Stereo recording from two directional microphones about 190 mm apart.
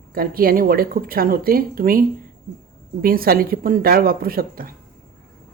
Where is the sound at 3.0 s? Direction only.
50° right (ahead or behind).